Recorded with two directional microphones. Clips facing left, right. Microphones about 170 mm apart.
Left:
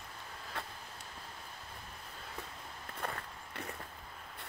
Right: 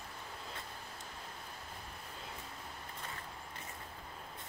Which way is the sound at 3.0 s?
60° left (ahead or behind).